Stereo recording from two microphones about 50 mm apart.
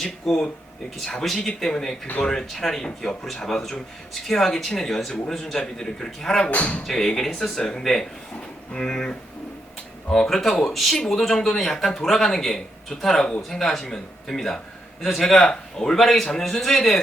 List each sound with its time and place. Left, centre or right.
0.0 s speech: centre
6.5 s speech: left
6.8 s speech: centre